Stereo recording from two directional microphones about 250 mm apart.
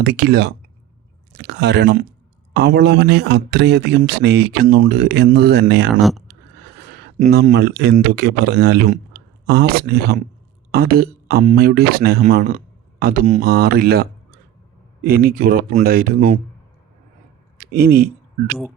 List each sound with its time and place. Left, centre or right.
0.0 s a man's voice: right
5.9 s speech: centre
7.2 s a man's voice: right
17.6 s a sound: right